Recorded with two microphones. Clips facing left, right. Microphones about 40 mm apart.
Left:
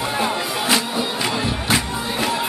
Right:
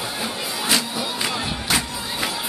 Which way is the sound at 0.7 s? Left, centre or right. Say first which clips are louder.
Left 2 dB; centre.